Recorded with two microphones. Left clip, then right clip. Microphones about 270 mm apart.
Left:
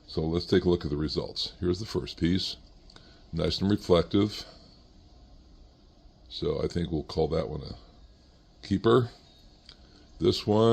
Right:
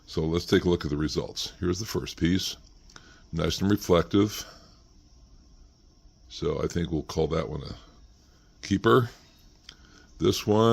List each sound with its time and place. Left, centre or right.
0.1 s speech: right
6.2 s speech: right
9.6 s a sound: right